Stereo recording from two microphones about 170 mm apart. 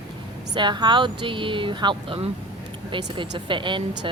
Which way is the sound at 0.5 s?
25° right (ahead or behind).